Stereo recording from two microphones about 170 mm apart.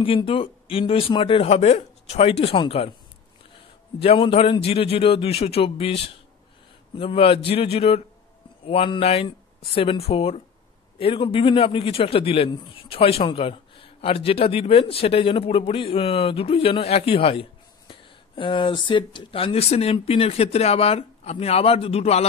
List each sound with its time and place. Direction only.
0.0 s a man's voice: 30° left (ahead or behind)